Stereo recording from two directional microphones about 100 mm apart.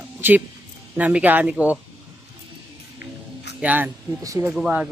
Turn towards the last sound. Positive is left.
turn(degrees=-10)  # may be behind; listen again after turning